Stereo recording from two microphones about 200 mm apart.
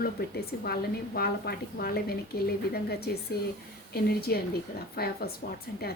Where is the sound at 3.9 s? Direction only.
50° left (ahead or behind).